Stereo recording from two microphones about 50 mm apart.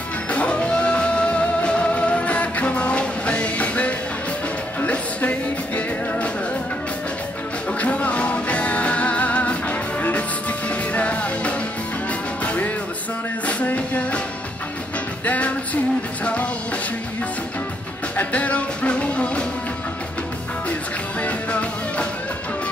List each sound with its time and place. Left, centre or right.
0.3 s music: left
7.8 s music: left
15.2 s music: left
18.1 s music: left
21.2 s music: left